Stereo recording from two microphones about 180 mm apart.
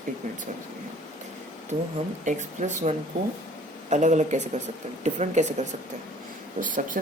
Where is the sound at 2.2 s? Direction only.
40° right (ahead or behind).